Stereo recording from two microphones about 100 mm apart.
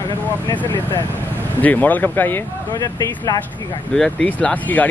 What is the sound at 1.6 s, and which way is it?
Speech, 15° left (ahead or behind).